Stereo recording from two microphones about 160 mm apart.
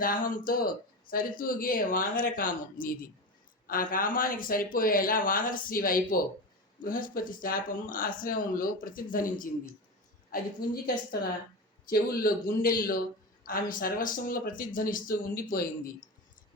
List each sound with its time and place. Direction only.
0.0 s speech: 60° left (ahead or behind)
10.6 s a woman's voice: 70° left (ahead or behind)
11.9 s speech: 65° left (ahead or behind)